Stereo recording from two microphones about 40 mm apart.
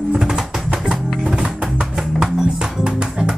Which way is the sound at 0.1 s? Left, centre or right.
Centre.